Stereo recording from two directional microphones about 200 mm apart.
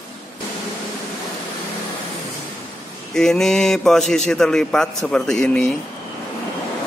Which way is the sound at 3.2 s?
5° left (ahead or behind).